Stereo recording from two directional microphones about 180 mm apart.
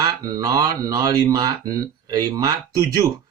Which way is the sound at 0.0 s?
20° right (ahead or behind).